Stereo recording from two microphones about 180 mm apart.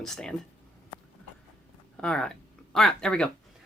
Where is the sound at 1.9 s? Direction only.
5° left (ahead or behind).